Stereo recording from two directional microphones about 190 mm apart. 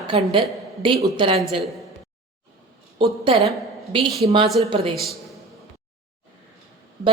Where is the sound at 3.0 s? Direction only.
25° right (ahead or behind).